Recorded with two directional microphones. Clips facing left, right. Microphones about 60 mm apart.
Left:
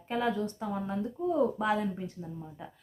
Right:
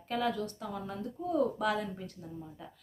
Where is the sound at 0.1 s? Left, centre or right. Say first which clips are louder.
Left 2 dB; left.